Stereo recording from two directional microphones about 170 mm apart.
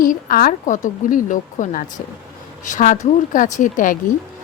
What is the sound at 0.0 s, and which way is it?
A woman's voice, 55° left (ahead or behind).